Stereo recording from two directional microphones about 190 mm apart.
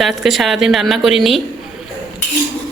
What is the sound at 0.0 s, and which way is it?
Speech, centre (ahead or behind).